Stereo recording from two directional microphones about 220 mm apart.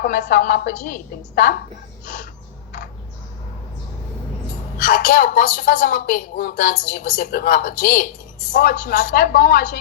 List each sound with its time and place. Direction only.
0.0 s a woman's voice: 40° left (ahead or behind)
4.8 s a woman's voice: 40° left (ahead or behind)